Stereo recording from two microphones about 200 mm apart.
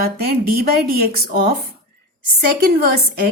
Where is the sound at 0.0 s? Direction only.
50° right (ahead or behind).